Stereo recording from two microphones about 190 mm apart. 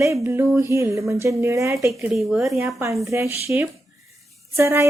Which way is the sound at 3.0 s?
15° right (ahead or behind).